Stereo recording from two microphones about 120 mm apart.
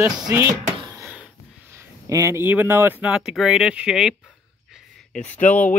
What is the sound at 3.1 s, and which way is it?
Speech, 5° right (ahead or behind).